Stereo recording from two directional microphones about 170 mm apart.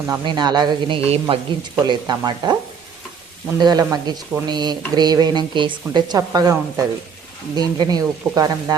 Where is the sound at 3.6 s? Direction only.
25° right (ahead or behind).